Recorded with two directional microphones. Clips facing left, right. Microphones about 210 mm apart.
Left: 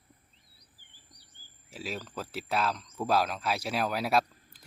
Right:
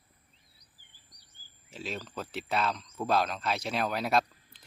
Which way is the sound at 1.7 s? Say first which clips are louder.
Even; 5° left (ahead or behind).